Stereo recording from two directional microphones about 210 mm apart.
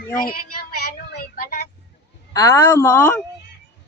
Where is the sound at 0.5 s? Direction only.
45° left (ahead or behind).